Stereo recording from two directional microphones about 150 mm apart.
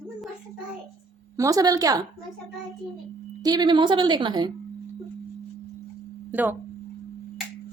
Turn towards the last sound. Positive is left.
turn(degrees=-10)  # may be behind; listen again after turning